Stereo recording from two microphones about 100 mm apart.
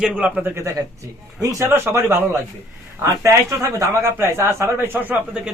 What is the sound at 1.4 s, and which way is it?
Speech, 30° right (ahead or behind).